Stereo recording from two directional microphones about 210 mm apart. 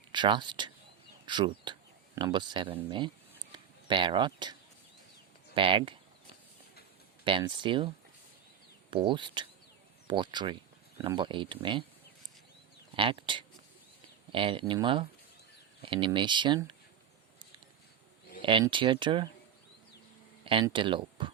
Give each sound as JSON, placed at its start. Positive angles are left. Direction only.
{"t": 0.1, "sound": "speech", "side_deg": -20}
{"t": 3.5, "sound": "a sound", "side_deg": -20}
{"t": 5.5, "sound": "speech", "side_deg": -25}
{"t": 7.3, "sound": "speech", "side_deg": -25}
{"t": 8.9, "sound": "speech", "side_deg": -25}
{"t": 13.0, "sound": "speech", "side_deg": -25}
{"t": 18.4, "sound": "speech", "side_deg": -25}
{"t": 20.4, "sound": "a sound", "side_deg": -25}
{"t": 20.7, "sound": "speech", "side_deg": -25}